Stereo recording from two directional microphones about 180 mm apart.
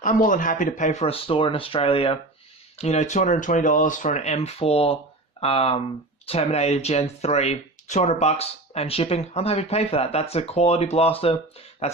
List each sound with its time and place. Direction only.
0.0 s speech: 45° left (ahead or behind)